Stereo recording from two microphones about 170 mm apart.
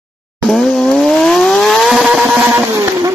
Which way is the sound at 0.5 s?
5° left (ahead or behind).